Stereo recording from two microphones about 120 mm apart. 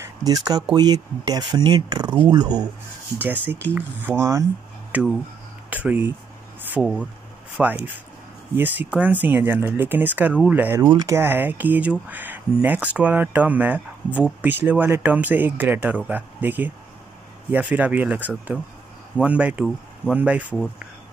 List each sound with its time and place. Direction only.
0.0 s speech: 30° right (ahead or behind)
3.2 s speech: 15° right (ahead or behind)
4.9 s speech: 10° right (ahead or behind)
6.8 s speech: centre (ahead or behind)
7.5 s speech: 10° right (ahead or behind)
10.8 s speech: 30° right (ahead or behind); by 20.4 s 10° right (ahead or behind)